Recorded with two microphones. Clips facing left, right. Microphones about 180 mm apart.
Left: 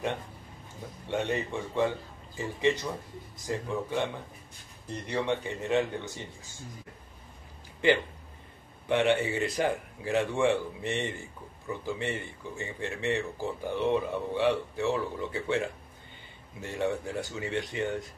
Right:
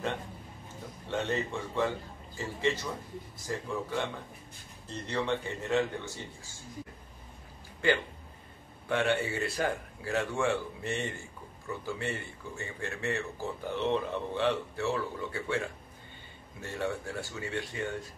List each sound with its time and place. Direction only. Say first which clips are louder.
1.0 s speech: left 2 dB; 15° left (ahead or behind)
8.8 s speech: left 4 dB; 20° left (ahead or behind)